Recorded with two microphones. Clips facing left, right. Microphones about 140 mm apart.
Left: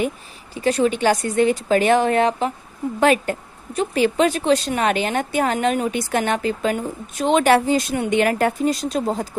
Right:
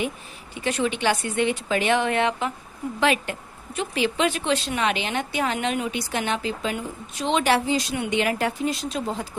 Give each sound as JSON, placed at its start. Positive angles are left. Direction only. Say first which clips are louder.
{"t": 0.5, "sound": "a woman's voice", "louder": "left 6 dB", "side_deg": 35}